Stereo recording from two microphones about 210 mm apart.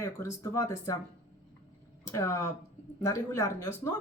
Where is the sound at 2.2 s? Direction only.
15° left (ahead or behind).